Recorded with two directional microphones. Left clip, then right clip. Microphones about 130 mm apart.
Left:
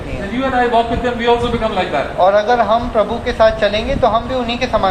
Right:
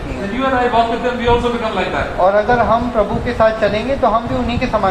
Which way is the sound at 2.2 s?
30° left (ahead or behind).